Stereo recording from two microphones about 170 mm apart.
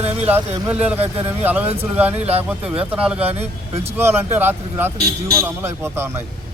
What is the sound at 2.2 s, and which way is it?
Speech, 35° right (ahead or behind).